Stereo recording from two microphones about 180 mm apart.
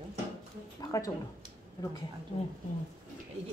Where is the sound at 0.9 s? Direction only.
20° left (ahead or behind).